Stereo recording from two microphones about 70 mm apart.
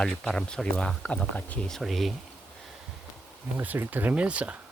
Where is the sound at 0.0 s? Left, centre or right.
Centre.